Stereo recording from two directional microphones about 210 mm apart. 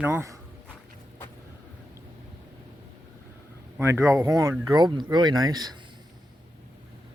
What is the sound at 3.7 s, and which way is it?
Speech, 10° right (ahead or behind).